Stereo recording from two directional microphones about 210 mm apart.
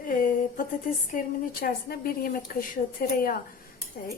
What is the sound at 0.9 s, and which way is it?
A woman's voice, 40° left (ahead or behind).